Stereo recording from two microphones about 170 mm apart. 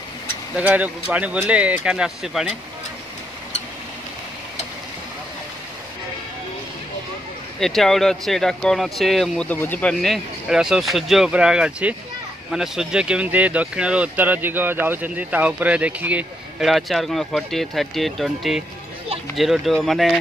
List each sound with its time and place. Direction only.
0.6 s speech: 10° right (ahead or behind)
7.6 s speech: centre (ahead or behind)